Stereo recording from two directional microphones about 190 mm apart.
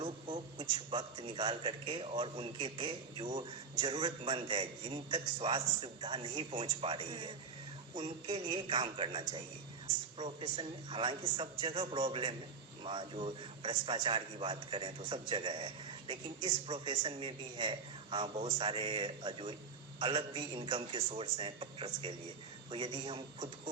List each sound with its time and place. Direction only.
0.0 s a man's voice: 25° right (ahead or behind)